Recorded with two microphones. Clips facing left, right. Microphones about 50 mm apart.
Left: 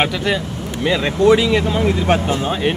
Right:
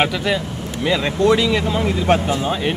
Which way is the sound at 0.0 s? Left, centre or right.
Centre.